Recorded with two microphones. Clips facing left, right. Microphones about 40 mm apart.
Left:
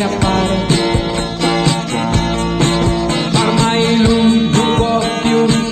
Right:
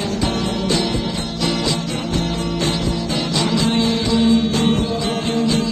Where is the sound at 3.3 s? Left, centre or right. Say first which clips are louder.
Left 4 dB; left.